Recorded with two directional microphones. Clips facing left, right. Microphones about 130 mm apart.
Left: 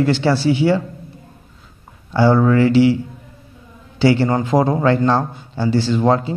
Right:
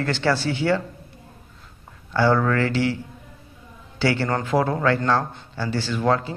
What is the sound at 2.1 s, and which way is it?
Speech, 15° left (ahead or behind).